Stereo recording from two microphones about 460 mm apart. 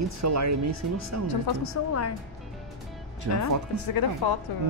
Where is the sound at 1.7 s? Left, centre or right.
Left.